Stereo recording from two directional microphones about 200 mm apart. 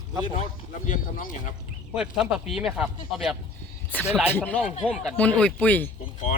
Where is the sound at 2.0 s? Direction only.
5° right (ahead or behind).